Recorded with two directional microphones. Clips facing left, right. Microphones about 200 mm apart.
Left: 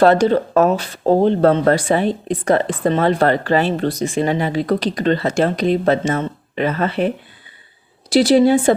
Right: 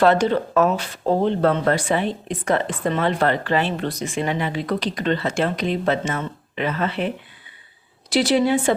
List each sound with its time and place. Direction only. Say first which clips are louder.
0.0 s speech: left 4 dB; 40° left (ahead or behind)
8.1 s speech: left 6 dB; 35° left (ahead or behind)